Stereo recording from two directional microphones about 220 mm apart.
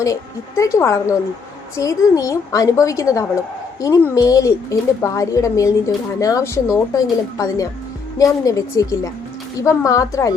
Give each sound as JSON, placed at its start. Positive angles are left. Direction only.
{"t": 0.0, "sound": "a woman's voice", "side_deg": 15}